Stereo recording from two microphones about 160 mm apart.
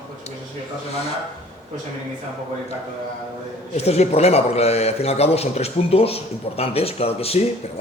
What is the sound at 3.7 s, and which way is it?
A man's voice, 40° left (ahead or behind).